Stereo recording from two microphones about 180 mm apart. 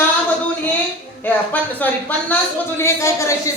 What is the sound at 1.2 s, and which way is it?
A woman's voice, 10° left (ahead or behind).